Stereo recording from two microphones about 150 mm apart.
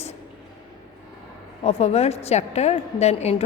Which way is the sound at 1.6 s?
45° left (ahead or behind).